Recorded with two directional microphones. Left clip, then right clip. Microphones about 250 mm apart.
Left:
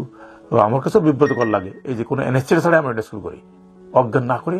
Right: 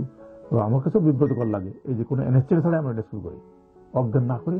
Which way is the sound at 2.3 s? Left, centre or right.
Centre.